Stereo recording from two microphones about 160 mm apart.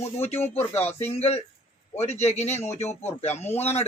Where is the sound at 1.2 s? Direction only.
40° left (ahead or behind).